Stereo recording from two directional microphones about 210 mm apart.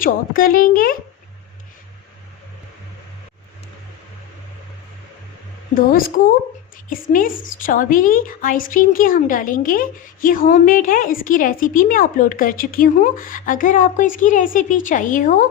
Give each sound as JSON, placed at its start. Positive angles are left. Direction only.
{"t": 0.0, "sound": "a woman's voice", "side_deg": 40}
{"t": 5.7, "sound": "a woman's voice", "side_deg": 40}